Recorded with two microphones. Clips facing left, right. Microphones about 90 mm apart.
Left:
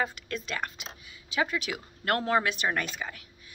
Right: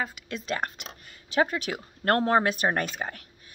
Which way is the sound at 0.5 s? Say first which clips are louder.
Right 4 dB; 45° right (ahead or behind).